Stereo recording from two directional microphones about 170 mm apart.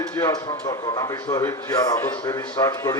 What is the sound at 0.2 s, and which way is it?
A man's voice, 20° left (ahead or behind).